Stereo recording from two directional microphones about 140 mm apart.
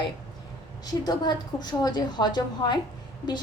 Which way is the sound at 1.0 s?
30° left (ahead or behind).